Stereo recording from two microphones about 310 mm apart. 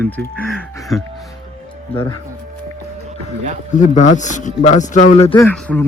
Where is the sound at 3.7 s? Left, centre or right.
Left.